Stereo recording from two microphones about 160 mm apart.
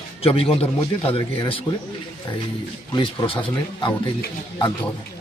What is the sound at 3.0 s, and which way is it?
Speech, 35° left (ahead or behind).